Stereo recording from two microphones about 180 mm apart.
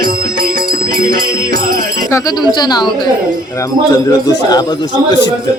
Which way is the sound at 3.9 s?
20° left (ahead or behind).